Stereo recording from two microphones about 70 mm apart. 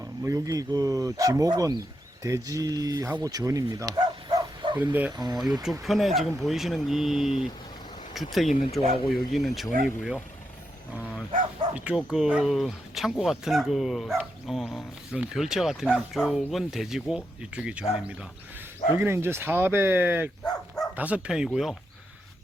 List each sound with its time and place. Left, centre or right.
0.0 s speech: right
2.2 s speech: right
3.2 s bow-wow: right
4.8 s speech: right
5.1 s speech: right
5.8 s speech: centre
11.9 s speech: centre
15.1 s speech: centre
18.9 s speech: right
20.4 s dog: centre
20.9 s speech: right
21.2 s speech: centre